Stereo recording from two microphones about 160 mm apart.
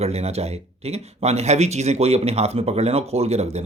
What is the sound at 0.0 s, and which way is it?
Speech, 40° right (ahead or behind).